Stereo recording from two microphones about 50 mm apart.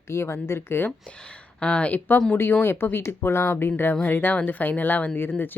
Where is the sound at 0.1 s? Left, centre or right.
Left.